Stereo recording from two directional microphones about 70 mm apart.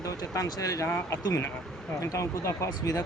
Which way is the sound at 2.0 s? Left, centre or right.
Left.